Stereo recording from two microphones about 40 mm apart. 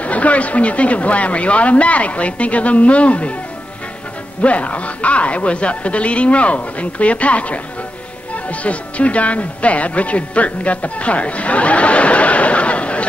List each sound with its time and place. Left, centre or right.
0.0 s speech: left
4.4 s speech: left